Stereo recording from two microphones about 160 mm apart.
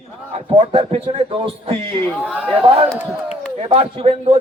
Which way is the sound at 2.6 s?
40° right (ahead or behind).